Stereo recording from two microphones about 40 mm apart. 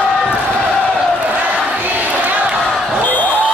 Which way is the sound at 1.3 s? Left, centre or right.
Right.